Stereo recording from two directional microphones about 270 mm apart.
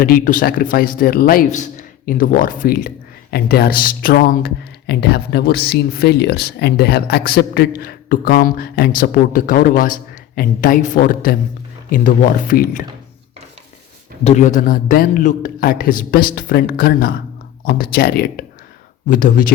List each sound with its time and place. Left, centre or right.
0.0 s speech: left
14.3 s speech: left